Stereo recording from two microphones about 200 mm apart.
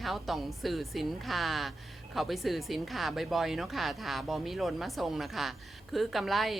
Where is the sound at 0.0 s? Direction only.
Centre (ahead or behind).